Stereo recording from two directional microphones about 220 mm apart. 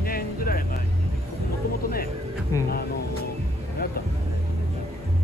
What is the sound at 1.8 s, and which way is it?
Speech, 40° left (ahead or behind).